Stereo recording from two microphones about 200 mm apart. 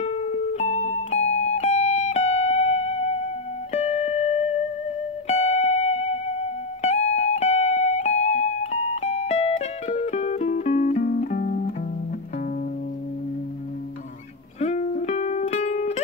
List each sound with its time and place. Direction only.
0.0 s music: 30° left (ahead or behind)
14.6 s music: 35° left (ahead or behind)